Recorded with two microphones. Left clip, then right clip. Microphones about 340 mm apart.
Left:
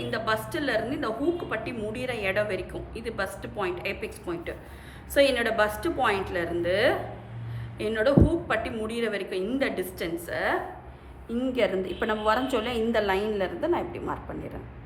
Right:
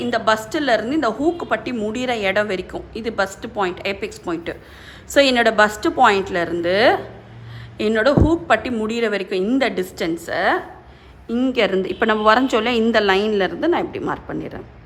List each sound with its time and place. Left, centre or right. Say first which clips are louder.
0.0 s a woman's voice: right 9 dB; centre